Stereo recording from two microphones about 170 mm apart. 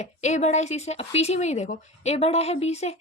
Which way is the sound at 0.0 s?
40° left (ahead or behind).